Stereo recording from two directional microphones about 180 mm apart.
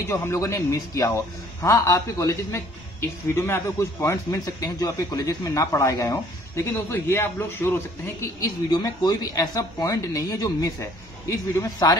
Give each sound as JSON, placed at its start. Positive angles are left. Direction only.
{"t": 0.1, "sound": "a man's voice", "side_deg": 15}